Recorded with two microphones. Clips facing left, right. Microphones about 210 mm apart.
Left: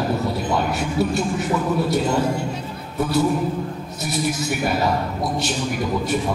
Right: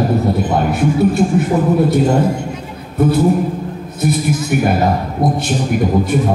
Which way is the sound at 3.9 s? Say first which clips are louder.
Right 7 dB; 55° right (ahead or behind).